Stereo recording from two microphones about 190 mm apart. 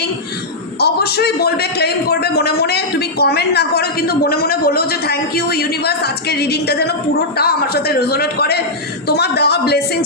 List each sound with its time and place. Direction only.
0.8 s a man's voice: 55° left (ahead or behind)